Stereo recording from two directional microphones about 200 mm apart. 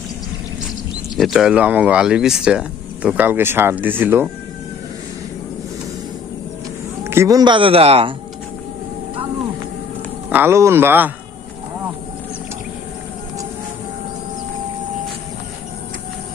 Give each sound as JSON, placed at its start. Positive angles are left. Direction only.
{"t": 1.1, "sound": "speech", "side_deg": 0}
{"t": 7.0, "sound": "speech", "side_deg": -15}
{"t": 10.2, "sound": "speech", "side_deg": -10}